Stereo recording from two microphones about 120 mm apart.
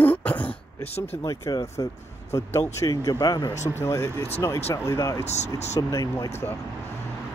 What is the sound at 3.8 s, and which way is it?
Speech, 20° left (ahead or behind).